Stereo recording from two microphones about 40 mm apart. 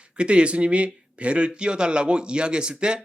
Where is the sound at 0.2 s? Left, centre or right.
Right.